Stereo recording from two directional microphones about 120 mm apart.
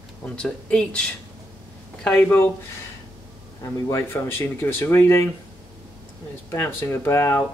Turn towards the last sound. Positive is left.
turn(degrees=20)  # may be behind; listen again after turning